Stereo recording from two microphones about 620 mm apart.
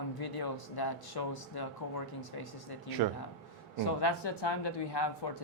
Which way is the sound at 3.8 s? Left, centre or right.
Left.